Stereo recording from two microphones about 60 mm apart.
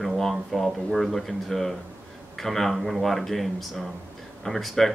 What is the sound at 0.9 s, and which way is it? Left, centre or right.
Speech, centre.